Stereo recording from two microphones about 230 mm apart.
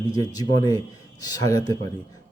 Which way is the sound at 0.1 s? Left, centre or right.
Centre.